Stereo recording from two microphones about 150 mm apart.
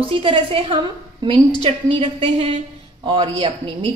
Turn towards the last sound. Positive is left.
turn(degrees=-35)  # may be behind; listen again after turning